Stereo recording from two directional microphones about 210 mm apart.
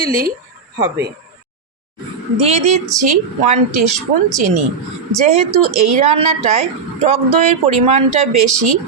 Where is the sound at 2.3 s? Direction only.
30° right (ahead or behind).